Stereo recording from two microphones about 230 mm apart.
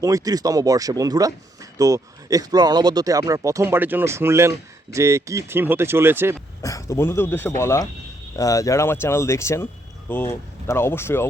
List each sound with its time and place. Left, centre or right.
0.0 s speech: centre
6.6 s speech: centre